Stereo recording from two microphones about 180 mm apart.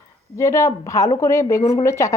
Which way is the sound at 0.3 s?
15° left (ahead or behind).